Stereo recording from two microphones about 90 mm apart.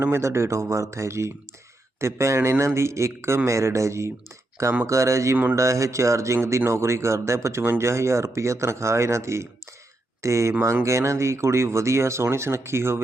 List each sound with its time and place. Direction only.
0.0 s speech: 30° right (ahead or behind)